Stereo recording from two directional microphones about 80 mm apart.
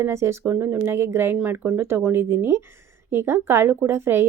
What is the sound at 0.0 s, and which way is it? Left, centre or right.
A woman's voice, right.